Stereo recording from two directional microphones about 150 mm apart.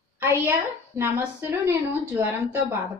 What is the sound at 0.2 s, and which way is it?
A woman's voice, 15° right (ahead or behind).